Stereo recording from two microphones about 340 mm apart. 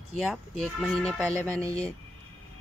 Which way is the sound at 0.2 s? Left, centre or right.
Centre.